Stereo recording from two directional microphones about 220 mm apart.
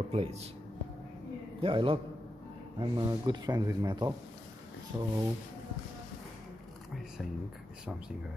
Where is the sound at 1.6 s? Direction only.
25° right (ahead or behind).